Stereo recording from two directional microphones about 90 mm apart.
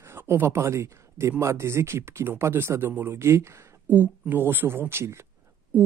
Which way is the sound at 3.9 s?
20° right (ahead or behind).